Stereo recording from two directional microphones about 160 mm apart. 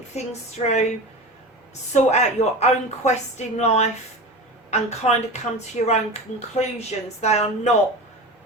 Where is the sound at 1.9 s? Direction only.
45° left (ahead or behind).